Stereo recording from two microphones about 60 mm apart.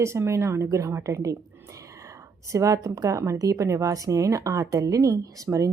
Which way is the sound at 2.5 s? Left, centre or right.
Right.